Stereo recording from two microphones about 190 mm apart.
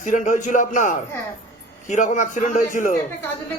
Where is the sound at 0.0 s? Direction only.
40° left (ahead or behind).